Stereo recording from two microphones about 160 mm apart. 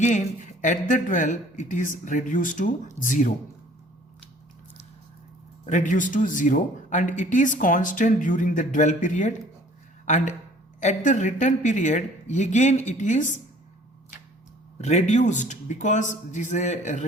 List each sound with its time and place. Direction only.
0.0 s a man's voice: 50° left (ahead or behind)
5.6 s a man's voice: 50° left (ahead or behind)
14.8 s a man's voice: 45° left (ahead or behind)